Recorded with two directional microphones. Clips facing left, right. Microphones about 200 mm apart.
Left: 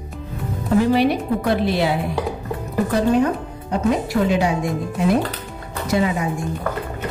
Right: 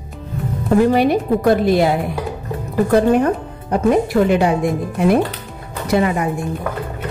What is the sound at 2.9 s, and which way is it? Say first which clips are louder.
Speech: right 4 dB; 55° right (ahead or behind).